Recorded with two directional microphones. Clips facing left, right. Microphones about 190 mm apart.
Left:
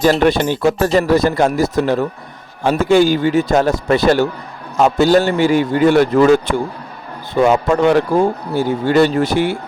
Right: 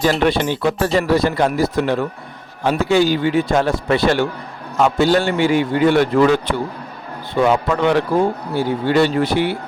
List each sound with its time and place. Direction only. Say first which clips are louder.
0.0 s a man's voice: left 3 dB; 45° left (ahead or behind)